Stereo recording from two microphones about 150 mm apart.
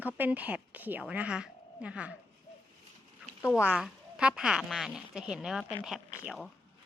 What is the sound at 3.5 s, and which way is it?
Speech, 5° right (ahead or behind).